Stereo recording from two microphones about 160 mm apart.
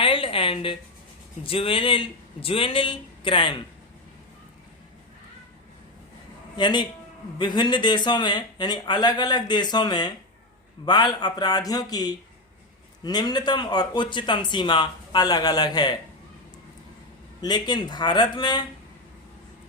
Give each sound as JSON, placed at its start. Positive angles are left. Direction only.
{"t": 0.0, "sound": "a sound", "side_deg": 35}
{"t": 1.5, "sound": "a man's voice", "side_deg": 35}
{"t": 6.6, "sound": "speech", "side_deg": 30}
{"t": 17.4, "sound": "speech", "side_deg": 25}